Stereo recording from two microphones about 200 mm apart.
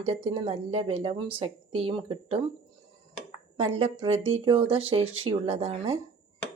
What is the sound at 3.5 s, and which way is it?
Speech, 30° right (ahead or behind).